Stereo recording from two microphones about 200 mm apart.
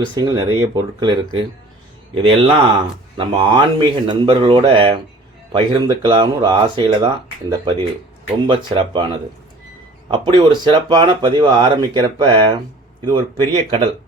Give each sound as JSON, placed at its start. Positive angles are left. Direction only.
{"t": 0.1, "sound": "speech", "side_deg": -20}
{"t": 2.1, "sound": "speech", "side_deg": -25}
{"t": 10.1, "sound": "speech", "side_deg": -25}